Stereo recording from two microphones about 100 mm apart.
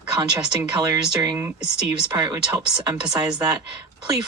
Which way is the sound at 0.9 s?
40° right (ahead or behind).